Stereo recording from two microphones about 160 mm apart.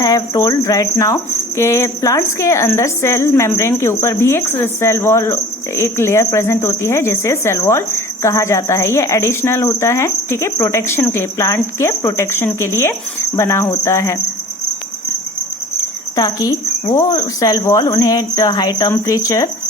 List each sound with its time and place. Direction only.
0.0 s cricket: 20° left (ahead or behind)
16.1 s speech: 20° left (ahead or behind)